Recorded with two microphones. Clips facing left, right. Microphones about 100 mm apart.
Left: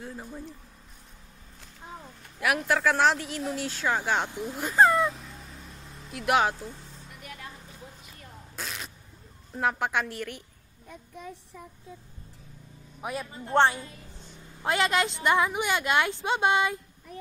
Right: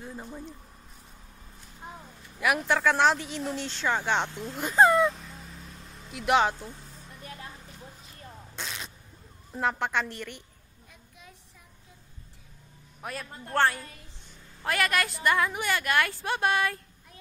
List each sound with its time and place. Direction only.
0.0 s speech: centre (ahead or behind)
2.4 s a man's voice: centre (ahead or behind)
4.6 s a sound: centre (ahead or behind)
7.2 s a sound: 30° right (ahead or behind)
8.5 s single-lens reflex camera: centre (ahead or behind)
9.5 s speech: 5° left (ahead or behind)
13.0 s a man's voice: 15° left (ahead or behind)